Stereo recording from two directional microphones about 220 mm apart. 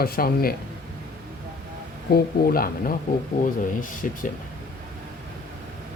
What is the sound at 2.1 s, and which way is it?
Speech, 40° left (ahead or behind).